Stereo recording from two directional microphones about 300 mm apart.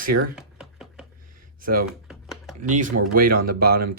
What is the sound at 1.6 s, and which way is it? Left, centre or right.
Speech, right.